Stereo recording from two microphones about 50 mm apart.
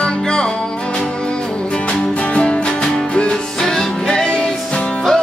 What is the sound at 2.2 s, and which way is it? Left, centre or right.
Music, left.